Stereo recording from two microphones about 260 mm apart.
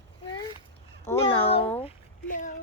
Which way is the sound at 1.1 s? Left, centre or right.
Centre.